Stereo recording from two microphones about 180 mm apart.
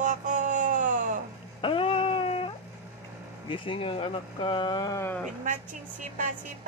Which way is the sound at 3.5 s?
30° left (ahead or behind).